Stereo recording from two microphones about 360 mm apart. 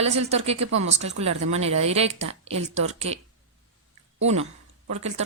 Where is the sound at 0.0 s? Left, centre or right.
Centre.